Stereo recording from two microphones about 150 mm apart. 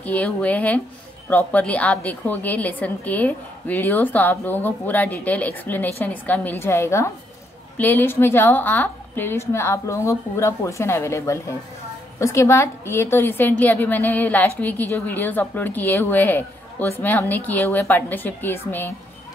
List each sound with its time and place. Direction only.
0.0 s a woman's voice: 10° left (ahead or behind)